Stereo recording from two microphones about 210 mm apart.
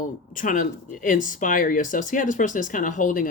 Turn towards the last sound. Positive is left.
turn(degrees=35)  # may be behind; listen again after turning